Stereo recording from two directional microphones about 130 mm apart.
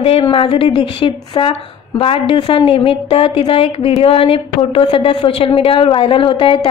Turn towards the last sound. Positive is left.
turn(degrees=40)  # may be behind; listen again after turning